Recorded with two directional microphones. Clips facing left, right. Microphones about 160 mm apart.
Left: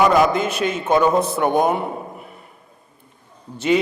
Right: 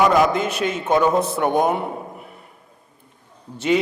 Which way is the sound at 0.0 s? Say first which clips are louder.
Left 1 dB; 25° left (ahead or behind).